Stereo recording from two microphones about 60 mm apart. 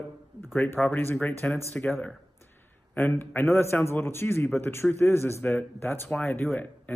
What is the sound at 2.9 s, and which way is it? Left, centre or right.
A man's voice, left.